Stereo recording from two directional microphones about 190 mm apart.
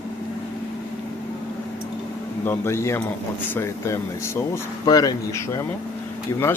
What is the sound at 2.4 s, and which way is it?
Speech, 10° left (ahead or behind).